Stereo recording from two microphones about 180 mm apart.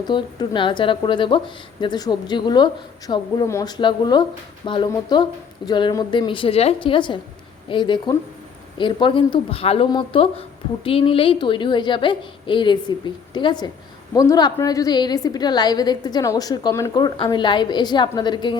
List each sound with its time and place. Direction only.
0.0 s a woman's voice: 25° left (ahead or behind)